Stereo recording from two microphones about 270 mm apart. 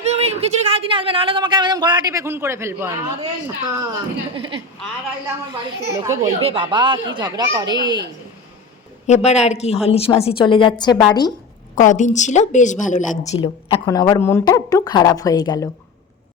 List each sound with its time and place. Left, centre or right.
0.0 s speech: right
4.4 s a woman's voice: centre
9.0 s a woman's voice: left
11.7 s a woman's voice: left